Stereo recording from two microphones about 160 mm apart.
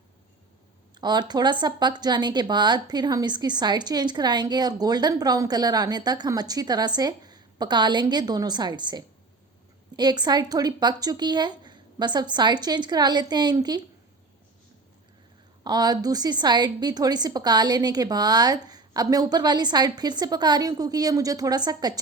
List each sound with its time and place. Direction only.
0.9 s speech: 25° right (ahead or behind)
15.6 s speech: 25° right (ahead or behind)